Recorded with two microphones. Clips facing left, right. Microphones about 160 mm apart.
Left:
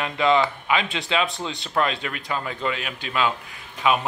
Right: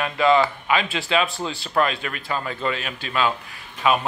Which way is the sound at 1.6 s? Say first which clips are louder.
Right 2 dB; 20° left (ahead or behind).